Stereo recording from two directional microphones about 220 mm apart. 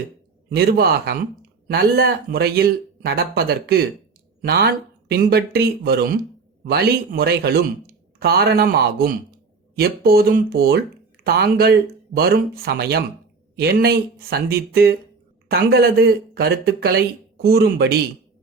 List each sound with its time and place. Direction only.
0.5 s speech: 45° right (ahead or behind)